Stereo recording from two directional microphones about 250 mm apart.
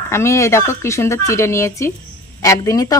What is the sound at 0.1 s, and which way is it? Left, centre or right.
A woman's voice, centre.